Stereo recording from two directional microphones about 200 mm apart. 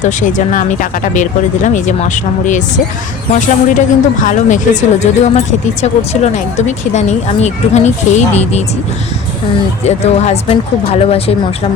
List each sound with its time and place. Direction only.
0.0 s speech: 40° left (ahead or behind)
9.8 s speech: 30° left (ahead or behind)